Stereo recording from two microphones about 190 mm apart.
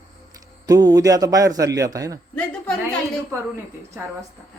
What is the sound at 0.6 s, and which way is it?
A man's voice, 20° right (ahead or behind).